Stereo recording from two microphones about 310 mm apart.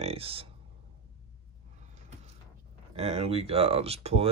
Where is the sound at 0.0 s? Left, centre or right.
Centre.